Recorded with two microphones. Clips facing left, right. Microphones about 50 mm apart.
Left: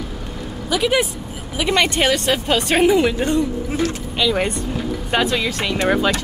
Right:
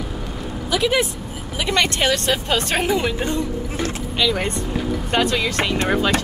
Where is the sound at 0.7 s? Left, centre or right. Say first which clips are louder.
Left 1 dB; centre.